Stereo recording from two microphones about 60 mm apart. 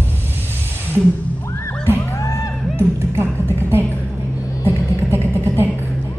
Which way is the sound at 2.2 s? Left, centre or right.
Left.